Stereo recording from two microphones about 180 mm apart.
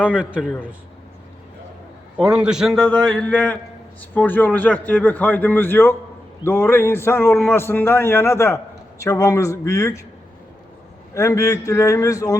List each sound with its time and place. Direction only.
0.2 s a man's voice: 5° right (ahead or behind)
2.1 s a man's voice: 5° right (ahead or behind); by 10.0 s 15° left (ahead or behind)
11.1 s a man's voice: 15° left (ahead or behind)